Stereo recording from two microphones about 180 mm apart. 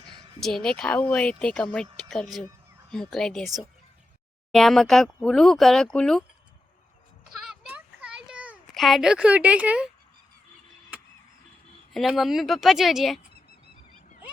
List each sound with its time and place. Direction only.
0.4 s speech: 5° left (ahead or behind)
7.4 s a sound: 5° right (ahead or behind)
11.9 s speech: centre (ahead or behind)